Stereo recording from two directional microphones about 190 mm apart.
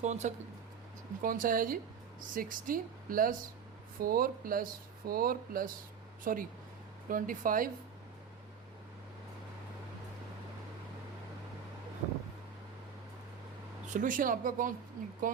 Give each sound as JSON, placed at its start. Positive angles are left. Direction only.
{"t": 0.0, "sound": "speech", "side_deg": -35}
{"t": 13.9, "sound": "speech", "side_deg": -45}